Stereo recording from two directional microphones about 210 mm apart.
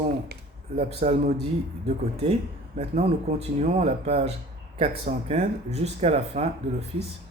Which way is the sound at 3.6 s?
30° right (ahead or behind).